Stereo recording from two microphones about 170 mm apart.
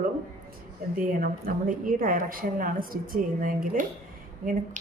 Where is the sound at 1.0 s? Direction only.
55° right (ahead or behind).